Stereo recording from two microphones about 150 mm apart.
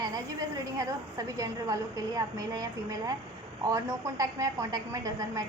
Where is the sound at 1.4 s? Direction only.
25° right (ahead or behind).